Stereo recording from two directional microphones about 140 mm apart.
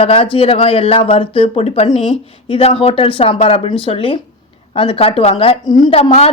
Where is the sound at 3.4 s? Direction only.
50° left (ahead or behind).